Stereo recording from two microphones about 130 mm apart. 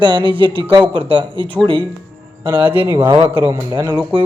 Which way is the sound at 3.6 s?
35° right (ahead or behind).